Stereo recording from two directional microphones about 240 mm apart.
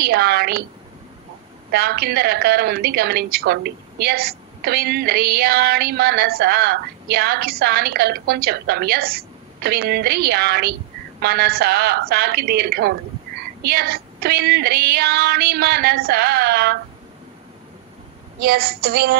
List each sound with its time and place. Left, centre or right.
0.0 s a woman's voice: right
1.7 s a woman's voice: right
18.4 s a woman's voice: right